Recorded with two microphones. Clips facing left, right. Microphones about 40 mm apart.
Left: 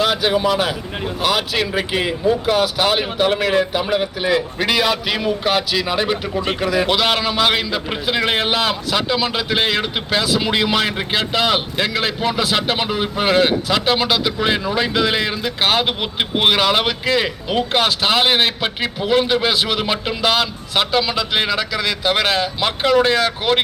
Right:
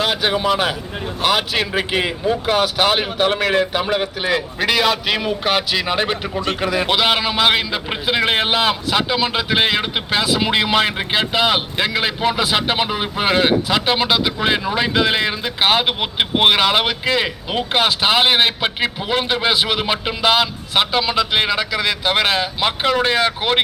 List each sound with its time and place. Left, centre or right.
0.0 s speech: right
5.8 s speech: right
6.9 s a man's voice: centre